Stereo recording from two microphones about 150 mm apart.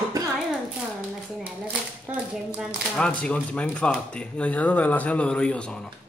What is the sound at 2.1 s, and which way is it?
Speech, 5° right (ahead or behind).